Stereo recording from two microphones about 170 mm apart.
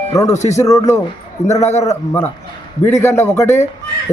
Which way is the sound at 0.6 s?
20° left (ahead or behind).